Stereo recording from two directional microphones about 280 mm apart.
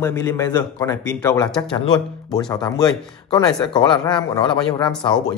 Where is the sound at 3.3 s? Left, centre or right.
Centre.